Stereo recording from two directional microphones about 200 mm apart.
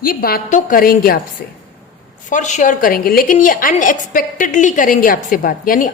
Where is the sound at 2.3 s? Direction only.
40° left (ahead or behind).